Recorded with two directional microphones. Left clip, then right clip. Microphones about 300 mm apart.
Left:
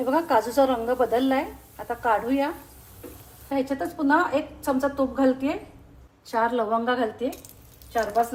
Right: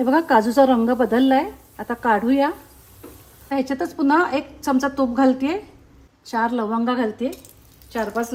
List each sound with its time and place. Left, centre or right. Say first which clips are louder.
0.0 s speech: right 5 dB; right
3.5 s a woman's voice: right 3 dB; right